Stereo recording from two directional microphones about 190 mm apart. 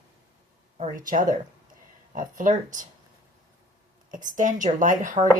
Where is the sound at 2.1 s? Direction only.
45° right (ahead or behind).